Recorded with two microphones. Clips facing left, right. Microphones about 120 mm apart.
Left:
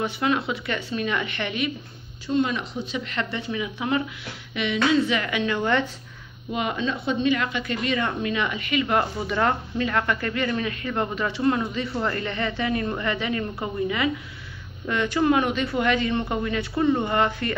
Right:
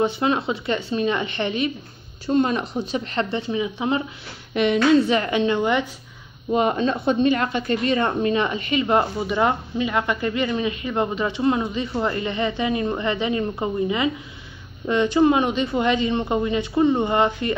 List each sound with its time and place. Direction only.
0.0 s a woman's voice: 25° right (ahead or behind)
2.2 s speech: 45° right (ahead or behind)
3.3 s a woman's voice: 25° right (ahead or behind)
4.6 s a woman's voice: 45° right (ahead or behind)
5.6 s speech: 15° right (ahead or behind)
6.5 s a woman's voice: 40° right (ahead or behind); by 17.6 s 20° right (ahead or behind)